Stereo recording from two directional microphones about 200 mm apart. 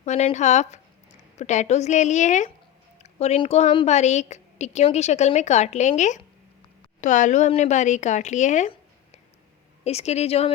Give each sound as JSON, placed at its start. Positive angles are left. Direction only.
{"t": 0.0, "sound": "a woman's voice", "side_deg": 35}
{"t": 7.0, "sound": "a woman's voice", "side_deg": 35}
{"t": 9.8, "sound": "a woman's voice", "side_deg": 35}